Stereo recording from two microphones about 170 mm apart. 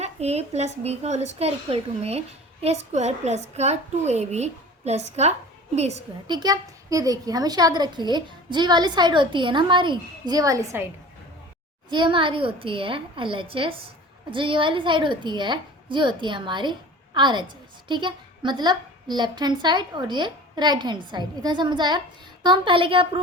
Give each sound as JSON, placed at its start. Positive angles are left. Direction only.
{"t": 0.0, "sound": "a woman's voice", "side_deg": -40}
{"t": 6.2, "sound": "a woman's voice", "side_deg": -25}
{"t": 11.9, "sound": "a woman's voice", "side_deg": -30}